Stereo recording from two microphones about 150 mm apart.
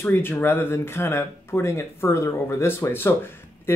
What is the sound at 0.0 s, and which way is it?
Speech, 15° left (ahead or behind).